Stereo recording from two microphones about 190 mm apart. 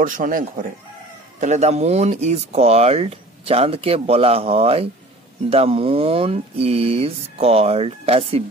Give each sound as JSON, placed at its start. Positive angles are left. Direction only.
{"t": 0.0, "sound": "speech", "side_deg": -45}